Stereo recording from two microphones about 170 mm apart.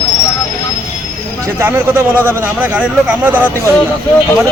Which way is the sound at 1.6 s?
15° right (ahead or behind).